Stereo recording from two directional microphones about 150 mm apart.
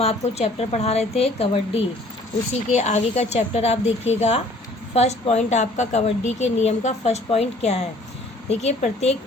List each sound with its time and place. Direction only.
0.0 s a woman's voice: 45° left (ahead or behind)